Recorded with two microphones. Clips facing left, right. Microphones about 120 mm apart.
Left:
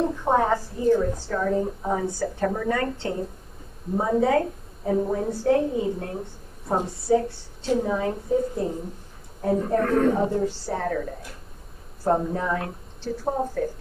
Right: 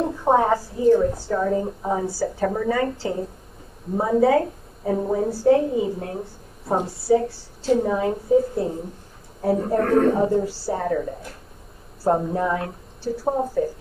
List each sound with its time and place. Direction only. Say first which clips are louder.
0.0 s a woman's voice: right 3 dB; 15° right (ahead or behind)
12.0 s speech: right 2 dB; 5° right (ahead or behind)